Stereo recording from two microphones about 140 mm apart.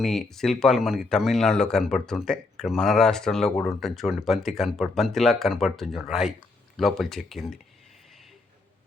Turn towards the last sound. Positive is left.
turn(degrees=0)  # may be behind; listen again after turning